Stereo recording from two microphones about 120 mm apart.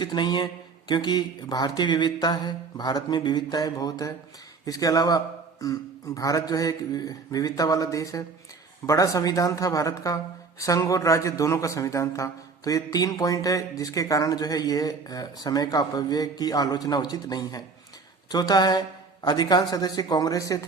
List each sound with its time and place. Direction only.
0.0 s a man's voice: 40° left (ahead or behind)